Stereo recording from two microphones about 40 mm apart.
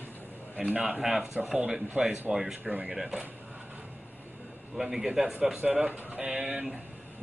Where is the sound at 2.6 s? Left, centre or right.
Right.